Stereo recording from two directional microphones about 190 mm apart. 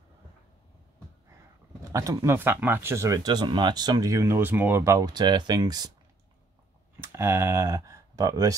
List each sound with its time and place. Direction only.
1.9 s speech: 15° right (ahead or behind)
7.0 s speech: 15° right (ahead or behind)